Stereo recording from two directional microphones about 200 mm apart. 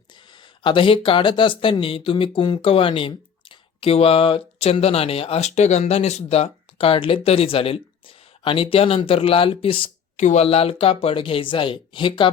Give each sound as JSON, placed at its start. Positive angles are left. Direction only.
{"t": 0.6, "sound": "speech", "side_deg": 25}